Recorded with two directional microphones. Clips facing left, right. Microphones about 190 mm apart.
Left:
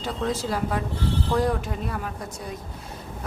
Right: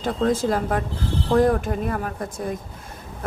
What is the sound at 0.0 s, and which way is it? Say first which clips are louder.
Speech: right 6 dB; 50° right (ahead or behind).